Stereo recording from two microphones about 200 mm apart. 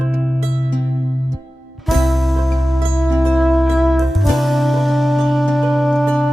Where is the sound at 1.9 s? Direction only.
Centre (ahead or behind).